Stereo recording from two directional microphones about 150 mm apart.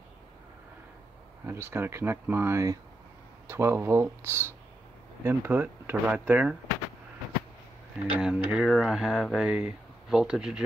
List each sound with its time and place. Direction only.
1.4 s speech: 15° right (ahead or behind)
8.2 s speech: 5° right (ahead or behind)